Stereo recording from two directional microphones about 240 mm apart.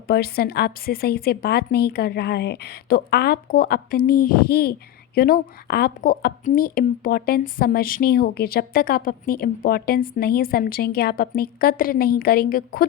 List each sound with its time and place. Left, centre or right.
0.1 s a woman's voice: left